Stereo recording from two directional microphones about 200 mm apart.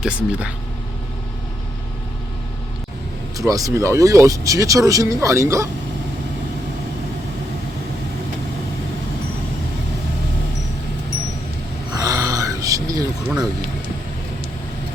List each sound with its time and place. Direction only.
0.0 s speech: 5° right (ahead or behind)
3.3 s speech: 15° right (ahead or behind)
11.9 s a sound: 20° right (ahead or behind)